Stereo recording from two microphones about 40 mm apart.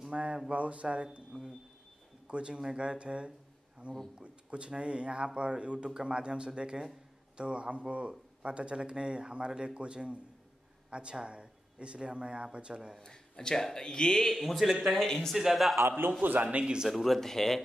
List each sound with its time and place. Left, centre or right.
0.1 s a sound: right
0.5 s mantra: right
1.3 s speech: centre
2.2 s speech: right
13.0 s a man's voice: centre
15.3 s speech: centre
16.4 s mantra: right
16.9 s speech: centre